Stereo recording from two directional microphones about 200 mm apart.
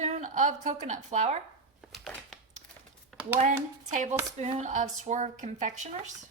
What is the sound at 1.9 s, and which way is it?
Crumpling, centre (ahead or behind).